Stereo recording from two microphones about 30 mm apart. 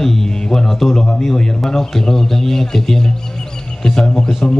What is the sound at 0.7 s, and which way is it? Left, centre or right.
A man's voice, centre.